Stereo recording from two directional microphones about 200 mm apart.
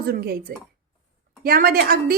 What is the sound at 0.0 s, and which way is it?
A woman's voice, 50° right (ahead or behind).